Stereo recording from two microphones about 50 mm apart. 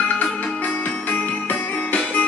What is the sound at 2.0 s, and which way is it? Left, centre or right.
Music, left.